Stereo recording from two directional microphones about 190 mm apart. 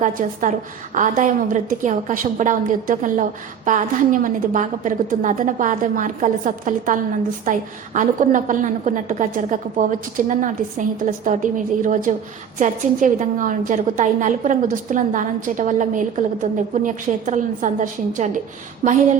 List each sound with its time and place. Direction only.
0.0 s a woman's voice: 45° right (ahead or behind)